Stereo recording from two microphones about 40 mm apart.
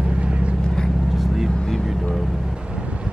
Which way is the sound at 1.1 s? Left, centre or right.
Centre.